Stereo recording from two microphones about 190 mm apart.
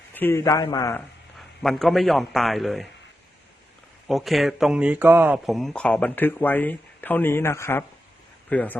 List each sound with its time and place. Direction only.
0.1 s a man's voice: 10° left (ahead or behind)
1.4 s speech: centre (ahead or behind)
4.1 s a man's voice: centre (ahead or behind)